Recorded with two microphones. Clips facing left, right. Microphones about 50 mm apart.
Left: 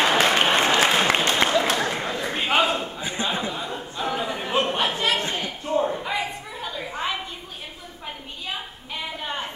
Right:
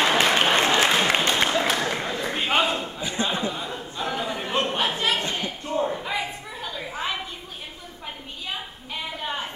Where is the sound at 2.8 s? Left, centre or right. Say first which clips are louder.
Even; left.